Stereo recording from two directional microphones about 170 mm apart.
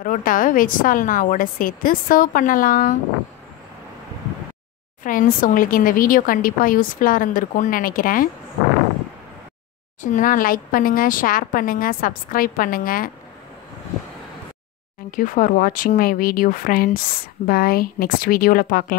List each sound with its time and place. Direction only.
0.0 s a woman's voice: 55° left (ahead or behind)
5.0 s speech: 55° left (ahead or behind)
10.1 s speech: 55° left (ahead or behind)
15.0 s speech: 55° left (ahead or behind)